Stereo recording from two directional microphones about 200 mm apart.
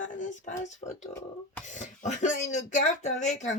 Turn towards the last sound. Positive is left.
turn(degrees=35)  # may be behind; listen again after turning